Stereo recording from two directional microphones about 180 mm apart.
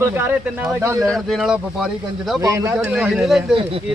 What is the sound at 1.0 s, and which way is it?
Speech, centre (ahead or behind).